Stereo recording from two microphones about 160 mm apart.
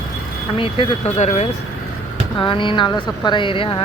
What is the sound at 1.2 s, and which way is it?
Speech, 45° left (ahead or behind).